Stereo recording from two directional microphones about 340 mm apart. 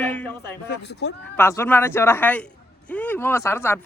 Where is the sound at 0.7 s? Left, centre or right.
Left.